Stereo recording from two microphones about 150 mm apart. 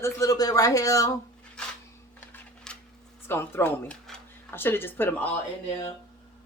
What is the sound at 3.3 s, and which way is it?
Speech, 15° left (ahead or behind).